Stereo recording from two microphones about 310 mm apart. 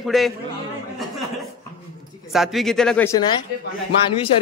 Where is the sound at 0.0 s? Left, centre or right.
Centre.